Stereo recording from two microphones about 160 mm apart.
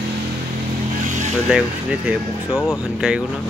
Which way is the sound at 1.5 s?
5° right (ahead or behind).